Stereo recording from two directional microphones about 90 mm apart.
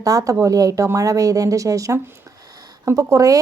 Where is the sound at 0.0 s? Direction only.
40° right (ahead or behind).